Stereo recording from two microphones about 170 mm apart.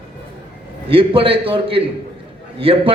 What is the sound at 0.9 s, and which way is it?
Speech, 30° right (ahead or behind).